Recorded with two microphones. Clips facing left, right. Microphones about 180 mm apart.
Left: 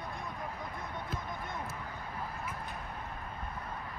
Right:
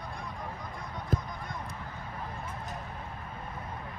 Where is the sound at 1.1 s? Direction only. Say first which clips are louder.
Right 12 dB; 50° right (ahead or behind).